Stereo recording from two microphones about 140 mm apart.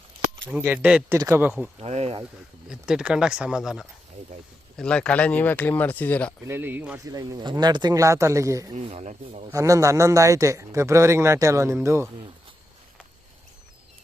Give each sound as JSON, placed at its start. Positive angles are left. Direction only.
{"t": 0.4, "sound": "speech", "side_deg": -10}
{"t": 1.8, "sound": "speech", "side_deg": -50}
{"t": 2.6, "sound": "speech", "side_deg": -5}
{"t": 4.8, "sound": "speech", "side_deg": 5}
{"t": 6.4, "sound": "speech", "side_deg": -15}
{"t": 7.0, "sound": "speech", "side_deg": -25}
{"t": 8.7, "sound": "speech", "side_deg": -50}
{"t": 9.5, "sound": "speech", "side_deg": -25}